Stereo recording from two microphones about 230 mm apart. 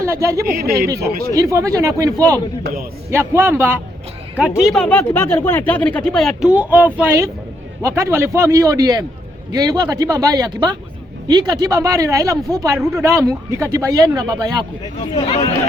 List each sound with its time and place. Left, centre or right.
0.0 s speech: centre
15.1 s speech: left